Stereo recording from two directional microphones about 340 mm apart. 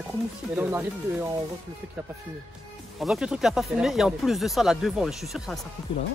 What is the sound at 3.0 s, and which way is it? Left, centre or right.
Speech, centre.